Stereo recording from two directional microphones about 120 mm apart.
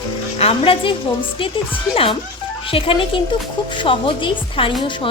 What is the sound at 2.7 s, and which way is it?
Speech, 45° left (ahead or behind).